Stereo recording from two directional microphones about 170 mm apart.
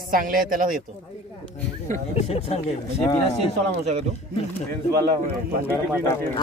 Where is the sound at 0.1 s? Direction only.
55° right (ahead or behind).